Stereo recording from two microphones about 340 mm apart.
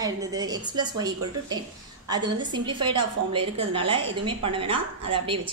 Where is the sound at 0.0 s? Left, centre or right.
Centre.